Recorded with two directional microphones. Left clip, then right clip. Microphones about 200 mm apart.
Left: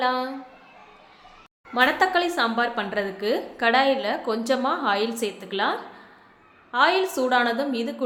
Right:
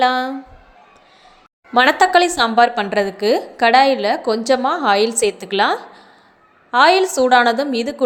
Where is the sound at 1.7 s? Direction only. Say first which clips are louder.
Right 8 dB; 45° right (ahead or behind).